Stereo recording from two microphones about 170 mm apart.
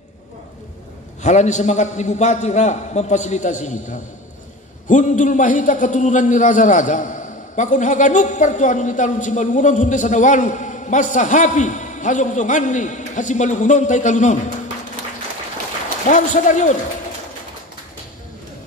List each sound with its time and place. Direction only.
1.2 s a man's voice: 45° left (ahead or behind)
16.1 s a man's voice: 45° left (ahead or behind)